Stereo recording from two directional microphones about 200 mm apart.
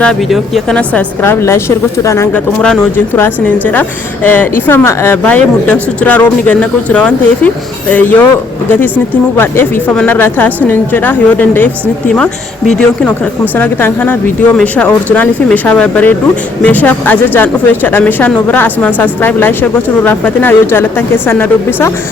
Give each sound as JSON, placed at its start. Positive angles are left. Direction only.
{"t": 0.0, "sound": "speech", "side_deg": 0}
{"t": 9.4, "sound": "speech", "side_deg": 10}
{"t": 12.7, "sound": "speech", "side_deg": 5}